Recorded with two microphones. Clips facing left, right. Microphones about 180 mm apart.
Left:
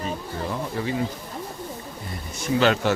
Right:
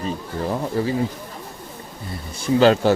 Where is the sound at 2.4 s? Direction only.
35° right (ahead or behind).